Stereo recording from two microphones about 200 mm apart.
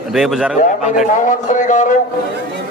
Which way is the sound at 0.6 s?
35° left (ahead or behind).